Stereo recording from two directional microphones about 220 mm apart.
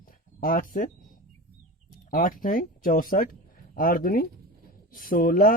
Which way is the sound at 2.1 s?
40° left (ahead or behind).